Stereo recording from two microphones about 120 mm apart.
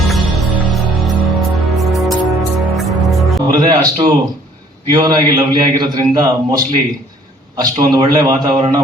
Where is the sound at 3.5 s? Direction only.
35° right (ahead or behind).